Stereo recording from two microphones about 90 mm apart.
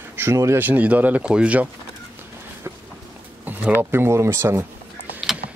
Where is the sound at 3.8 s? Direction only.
25° right (ahead or behind).